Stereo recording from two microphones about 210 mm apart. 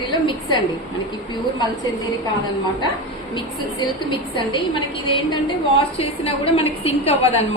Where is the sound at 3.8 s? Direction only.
20° left (ahead or behind).